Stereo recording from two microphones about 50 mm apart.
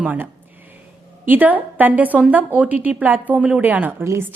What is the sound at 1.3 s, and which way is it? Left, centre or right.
A woman's voice, right.